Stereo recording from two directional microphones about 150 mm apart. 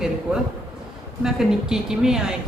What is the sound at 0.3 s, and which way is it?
A man's voice, 10° right (ahead or behind).